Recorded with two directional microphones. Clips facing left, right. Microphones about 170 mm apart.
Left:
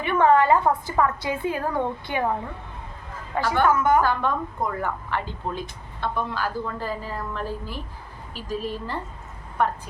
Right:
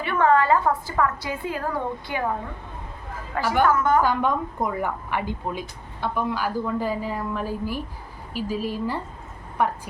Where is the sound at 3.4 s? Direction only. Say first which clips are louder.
Right 1 dB; 10° right (ahead or behind).